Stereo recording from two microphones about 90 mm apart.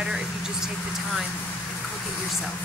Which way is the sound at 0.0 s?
5° right (ahead or behind).